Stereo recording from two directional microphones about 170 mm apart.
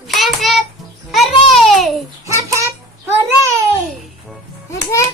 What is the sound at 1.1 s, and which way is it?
Babbling, centre (ahead or behind).